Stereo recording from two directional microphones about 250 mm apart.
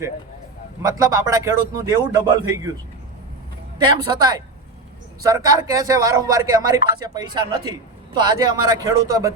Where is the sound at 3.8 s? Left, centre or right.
Centre.